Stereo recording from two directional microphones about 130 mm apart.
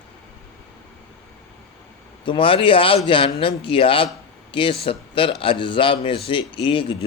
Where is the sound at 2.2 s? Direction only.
40° left (ahead or behind).